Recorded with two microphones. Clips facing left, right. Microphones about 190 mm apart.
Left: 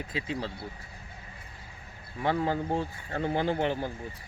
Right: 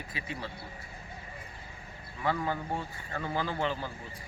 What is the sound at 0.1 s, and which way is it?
Speech, 90° left.